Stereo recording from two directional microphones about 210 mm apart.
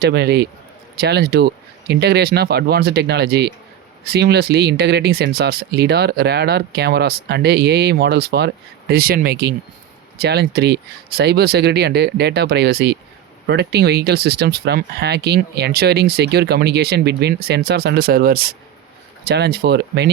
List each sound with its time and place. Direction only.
0.0 s speech: 50° right (ahead or behind)